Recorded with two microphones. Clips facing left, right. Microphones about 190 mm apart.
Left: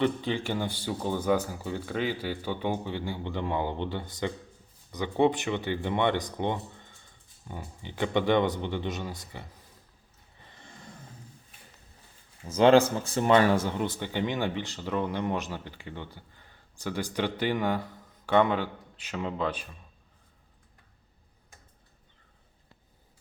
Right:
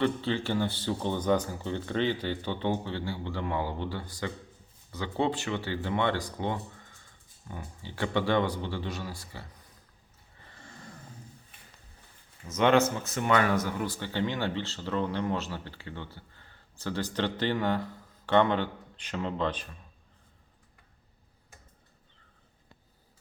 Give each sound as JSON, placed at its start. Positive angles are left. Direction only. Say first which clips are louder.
{"t": 0.0, "sound": "speech", "louder": "left 1 dB", "side_deg": 15}
{"t": 10.5, "sound": "a sound", "louder": "right 1 dB", "side_deg": 20}
{"t": 12.5, "sound": "speech", "louder": "left 4 dB", "side_deg": 30}